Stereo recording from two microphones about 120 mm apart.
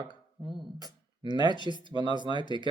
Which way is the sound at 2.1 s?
40° right (ahead or behind).